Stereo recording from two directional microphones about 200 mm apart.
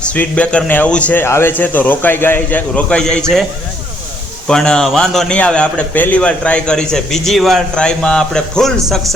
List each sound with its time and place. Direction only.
0.1 s speech: 5° left (ahead or behind)
4.4 s a man's voice: 5° left (ahead or behind)